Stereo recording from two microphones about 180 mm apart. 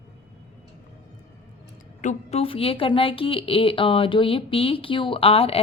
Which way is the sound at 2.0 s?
40° left (ahead or behind).